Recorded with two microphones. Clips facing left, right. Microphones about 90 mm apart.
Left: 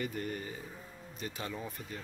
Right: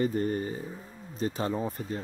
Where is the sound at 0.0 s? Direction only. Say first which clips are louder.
Right 10 dB; 35° right (ahead or behind).